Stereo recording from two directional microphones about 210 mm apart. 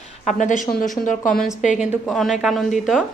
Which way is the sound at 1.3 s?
Centre (ahead or behind).